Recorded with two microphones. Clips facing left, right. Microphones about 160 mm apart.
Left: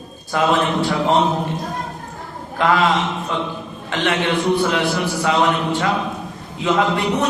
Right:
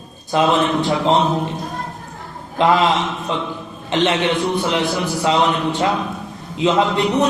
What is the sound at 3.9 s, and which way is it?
A man's voice, 20° right (ahead or behind).